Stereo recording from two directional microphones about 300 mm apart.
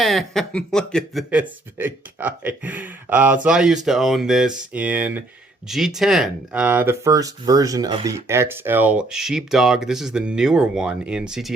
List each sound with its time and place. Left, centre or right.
0.0 s speech: centre